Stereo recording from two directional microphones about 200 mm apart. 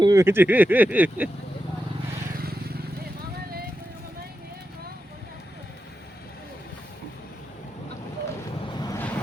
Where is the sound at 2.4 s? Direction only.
50° right (ahead or behind).